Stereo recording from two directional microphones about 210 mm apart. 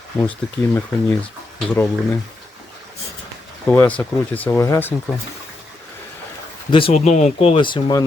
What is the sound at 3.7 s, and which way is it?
Speech, 10° left (ahead or behind).